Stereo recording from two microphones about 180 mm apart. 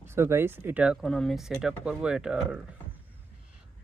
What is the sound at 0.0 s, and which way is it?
Speech, 15° right (ahead or behind).